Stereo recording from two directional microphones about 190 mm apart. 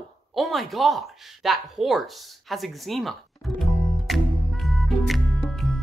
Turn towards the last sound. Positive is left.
turn(degrees=0)  # may be behind; listen again after turning